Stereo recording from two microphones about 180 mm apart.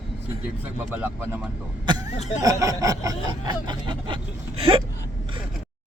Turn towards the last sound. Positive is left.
turn(degrees=-30)  # may be behind; listen again after turning